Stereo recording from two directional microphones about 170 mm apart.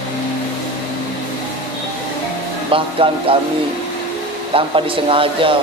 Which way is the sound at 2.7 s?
30° right (ahead or behind).